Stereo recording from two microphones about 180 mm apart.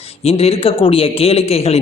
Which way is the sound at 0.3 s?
35° left (ahead or behind).